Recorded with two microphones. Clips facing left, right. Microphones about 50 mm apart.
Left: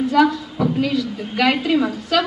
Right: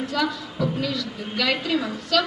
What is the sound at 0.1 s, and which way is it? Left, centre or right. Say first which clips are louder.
A woman's voice: left 9 dB; left.